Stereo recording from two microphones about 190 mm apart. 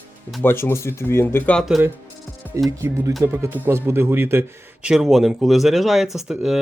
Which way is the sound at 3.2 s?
15° right (ahead or behind).